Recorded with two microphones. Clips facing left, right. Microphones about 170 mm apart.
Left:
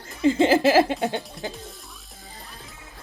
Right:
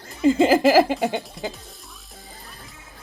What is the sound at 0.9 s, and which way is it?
Speech, 5° right (ahead or behind).